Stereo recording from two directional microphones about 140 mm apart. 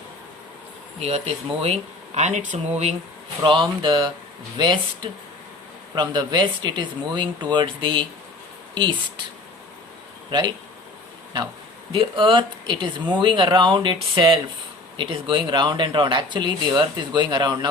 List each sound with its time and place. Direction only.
0.9 s speech: 50° right (ahead or behind)
3.4 s speech: 35° right (ahead or behind)
5.9 s speech: 30° right (ahead or behind)
11.9 s speech: 40° right (ahead or behind)